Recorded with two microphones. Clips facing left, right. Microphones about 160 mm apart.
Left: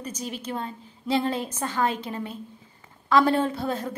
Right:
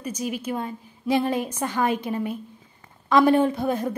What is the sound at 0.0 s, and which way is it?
Speech, 10° right (ahead or behind).